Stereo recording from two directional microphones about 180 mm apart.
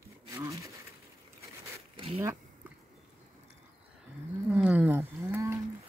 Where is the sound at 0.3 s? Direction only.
15° right (ahead or behind).